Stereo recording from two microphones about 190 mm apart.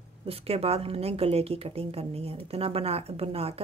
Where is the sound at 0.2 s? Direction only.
30° right (ahead or behind).